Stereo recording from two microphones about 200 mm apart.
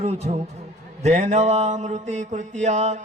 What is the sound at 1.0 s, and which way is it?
Mantra, 35° right (ahead or behind).